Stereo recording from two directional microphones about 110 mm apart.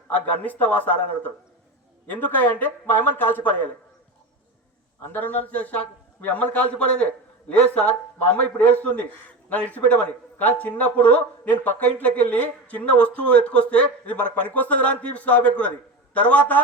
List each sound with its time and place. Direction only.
0.1 s speech: 15° left (ahead or behind)
5.1 s speech: 15° left (ahead or behind)